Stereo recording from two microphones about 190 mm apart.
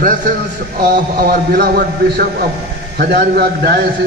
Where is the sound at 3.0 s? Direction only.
55° right (ahead or behind).